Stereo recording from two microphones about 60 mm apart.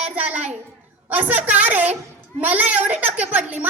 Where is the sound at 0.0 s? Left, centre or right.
Right.